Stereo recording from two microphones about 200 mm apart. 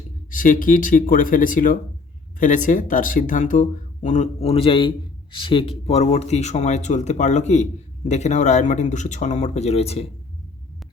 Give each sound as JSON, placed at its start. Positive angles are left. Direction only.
{"t": 0.3, "sound": "speech", "side_deg": 40}